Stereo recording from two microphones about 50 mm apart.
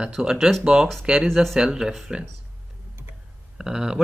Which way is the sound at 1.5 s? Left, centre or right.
Centre.